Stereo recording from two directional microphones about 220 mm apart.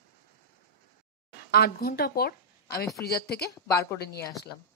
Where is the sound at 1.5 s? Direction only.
45° left (ahead or behind).